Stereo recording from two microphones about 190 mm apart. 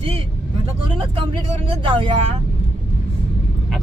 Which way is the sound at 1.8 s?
25° right (ahead or behind).